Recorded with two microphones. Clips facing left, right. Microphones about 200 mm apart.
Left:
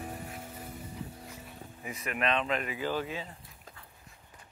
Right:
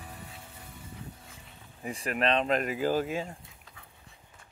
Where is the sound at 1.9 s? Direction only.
35° right (ahead or behind).